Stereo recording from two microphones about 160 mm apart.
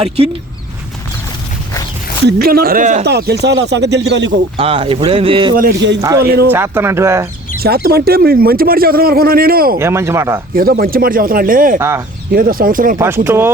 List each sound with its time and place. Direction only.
2.2 s speech: 70° right (ahead or behind); by 3.0 s 55° right (ahead or behind)
3.0 s speech: 85° right
4.5 s speech: 35° right (ahead or behind)
5.5 s speech: 80° right
6.0 s speech: 20° right (ahead or behind)
6.2 s speech: 80° right
6.5 s speech: 15° right (ahead or behind)
7.6 s speech: 75° right (ahead or behind)
9.7 s speech: 15° right (ahead or behind)
10.5 s speech: 65° right (ahead or behind)
11.8 s speech: 15° right (ahead or behind)
12.3 s speech: 60° right (ahead or behind)
13.2 s speech: 15° right (ahead or behind)